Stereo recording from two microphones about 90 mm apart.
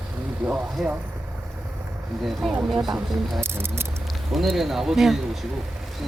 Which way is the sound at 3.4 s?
25° right (ahead or behind).